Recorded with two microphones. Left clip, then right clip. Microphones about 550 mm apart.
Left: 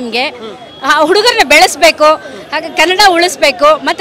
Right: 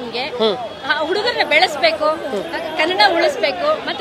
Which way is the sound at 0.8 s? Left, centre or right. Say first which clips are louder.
Left 11 dB; left.